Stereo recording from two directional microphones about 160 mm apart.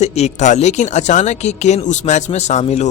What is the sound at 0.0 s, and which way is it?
Speech, 45° left (ahead or behind).